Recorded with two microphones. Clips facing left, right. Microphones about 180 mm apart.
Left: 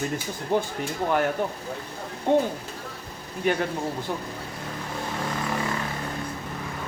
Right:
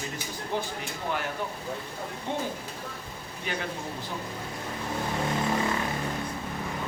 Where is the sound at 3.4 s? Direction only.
50° left (ahead or behind).